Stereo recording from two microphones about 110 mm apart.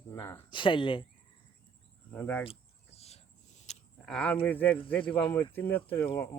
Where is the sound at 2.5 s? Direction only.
70° left (ahead or behind); by 3.7 s 90° left.